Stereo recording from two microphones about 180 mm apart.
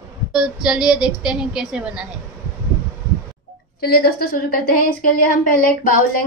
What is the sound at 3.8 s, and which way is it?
A woman's voice, 60° left (ahead or behind).